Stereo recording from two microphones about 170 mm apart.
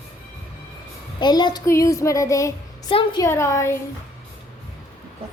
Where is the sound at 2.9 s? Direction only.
30° left (ahead or behind).